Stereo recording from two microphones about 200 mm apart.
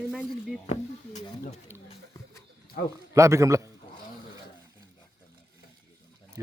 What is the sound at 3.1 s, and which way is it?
Speech, 15° right (ahead or behind).